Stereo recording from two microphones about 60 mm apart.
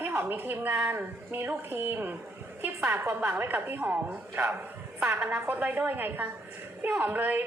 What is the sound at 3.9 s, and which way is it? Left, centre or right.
Speech, right.